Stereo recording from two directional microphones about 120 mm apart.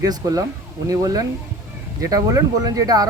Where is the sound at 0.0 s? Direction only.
30° right (ahead or behind).